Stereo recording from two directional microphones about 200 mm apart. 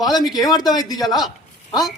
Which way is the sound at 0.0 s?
20° left (ahead or behind).